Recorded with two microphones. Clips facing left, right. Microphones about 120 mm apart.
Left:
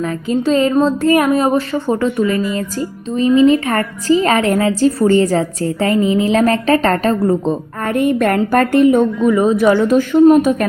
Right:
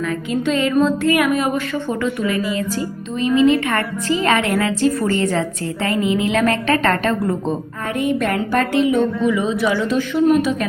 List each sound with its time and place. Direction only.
0.3 s a woman's voice: 35° left (ahead or behind)
7.9 s a woman's voice: 50° left (ahead or behind)